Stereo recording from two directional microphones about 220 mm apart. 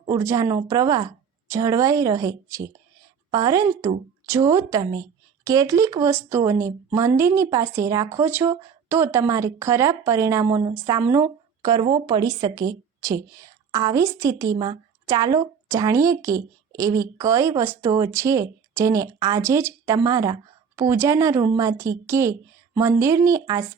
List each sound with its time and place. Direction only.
0.1 s speech: 15° right (ahead or behind)